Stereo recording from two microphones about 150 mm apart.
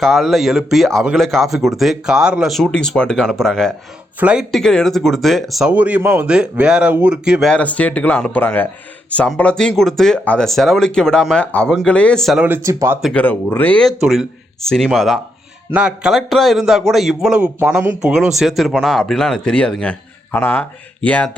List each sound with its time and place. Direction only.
0.0 s a man's voice: centre (ahead or behind)
7.5 s a man's voice: 10° left (ahead or behind)
12.5 s speech: 15° right (ahead or behind)
13.1 s a man's voice: 10° left (ahead or behind)